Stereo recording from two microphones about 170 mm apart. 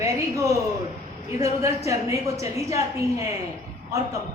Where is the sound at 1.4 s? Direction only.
15° right (ahead or behind).